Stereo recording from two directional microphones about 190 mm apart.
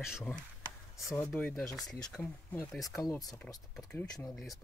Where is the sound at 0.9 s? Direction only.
15° left (ahead or behind).